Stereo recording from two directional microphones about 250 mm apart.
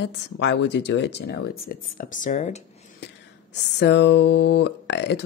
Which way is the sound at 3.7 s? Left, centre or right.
Left.